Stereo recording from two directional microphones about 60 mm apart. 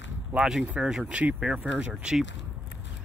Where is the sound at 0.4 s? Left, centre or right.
Centre.